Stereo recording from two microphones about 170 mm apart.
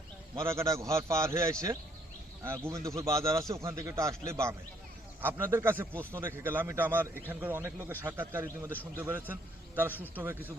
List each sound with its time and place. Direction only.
0.3 s a man's voice: 15° right (ahead or behind)